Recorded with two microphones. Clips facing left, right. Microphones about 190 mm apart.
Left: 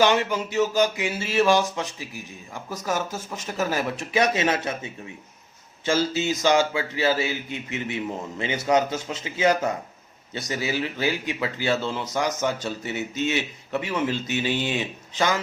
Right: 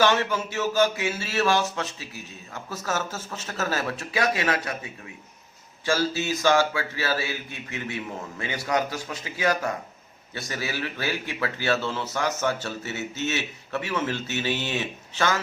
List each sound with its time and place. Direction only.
0.0 s a man's voice: 15° left (ahead or behind)